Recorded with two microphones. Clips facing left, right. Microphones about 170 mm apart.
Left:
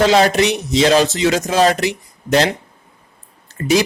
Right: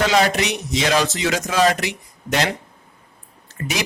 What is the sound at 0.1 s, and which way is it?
Speech, 30° left (ahead or behind).